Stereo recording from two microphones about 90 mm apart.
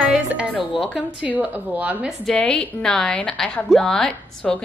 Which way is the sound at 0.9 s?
15° right (ahead or behind).